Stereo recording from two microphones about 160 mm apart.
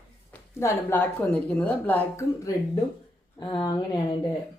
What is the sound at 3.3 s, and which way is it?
Speech, 30° left (ahead or behind).